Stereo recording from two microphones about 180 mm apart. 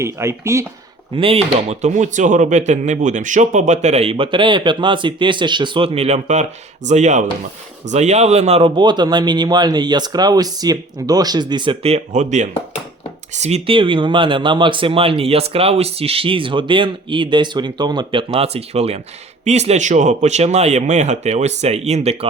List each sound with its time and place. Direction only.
0.0 s speech: 15° right (ahead or behind)
1.1 s speech: 30° right (ahead or behind)